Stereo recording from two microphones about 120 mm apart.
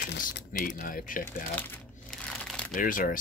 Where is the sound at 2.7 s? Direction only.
90° left.